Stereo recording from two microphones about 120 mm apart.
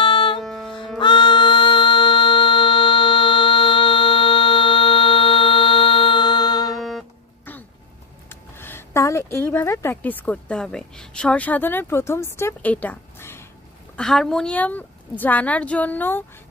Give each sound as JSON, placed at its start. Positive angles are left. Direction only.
{"t": 0.0, "sound": "music", "side_deg": 45}
{"t": 0.4, "sound": "music", "side_deg": 0}
{"t": 0.9, "sound": "music", "side_deg": 40}
{"t": 6.8, "sound": "music", "side_deg": 0}
{"t": 8.3, "sound": "speech", "side_deg": 20}
{"t": 13.9, "sound": "a woman's voice", "side_deg": 5}